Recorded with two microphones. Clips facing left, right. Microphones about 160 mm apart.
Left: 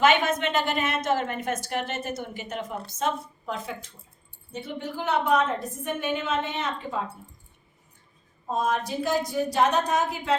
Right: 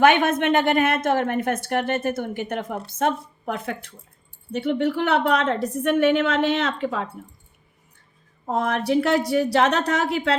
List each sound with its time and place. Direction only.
0.0 s a woman's voice: 55° right (ahead or behind); by 7.1 s 80° right
8.4 s a woman's voice: 70° right (ahead or behind)